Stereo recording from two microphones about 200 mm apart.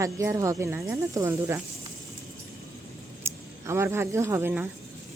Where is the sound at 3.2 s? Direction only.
15° right (ahead or behind).